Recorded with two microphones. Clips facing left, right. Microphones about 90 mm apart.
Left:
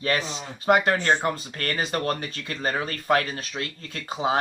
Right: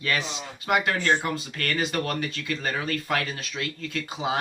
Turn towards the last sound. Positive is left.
turn(degrees=35)  # may be behind; listen again after turning